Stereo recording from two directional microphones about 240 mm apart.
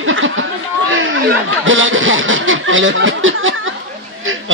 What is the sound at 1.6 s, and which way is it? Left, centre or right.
Speech, right.